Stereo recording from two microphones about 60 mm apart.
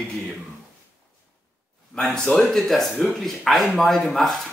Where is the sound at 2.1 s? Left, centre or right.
Centre.